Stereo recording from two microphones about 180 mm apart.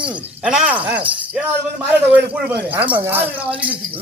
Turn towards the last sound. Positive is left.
turn(degrees=-10)  # may be behind; listen again after turning